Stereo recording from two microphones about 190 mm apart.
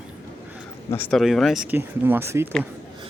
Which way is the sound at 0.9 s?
10° left (ahead or behind).